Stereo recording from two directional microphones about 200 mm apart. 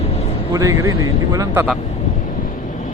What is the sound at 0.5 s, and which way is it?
Speech, 15° right (ahead or behind).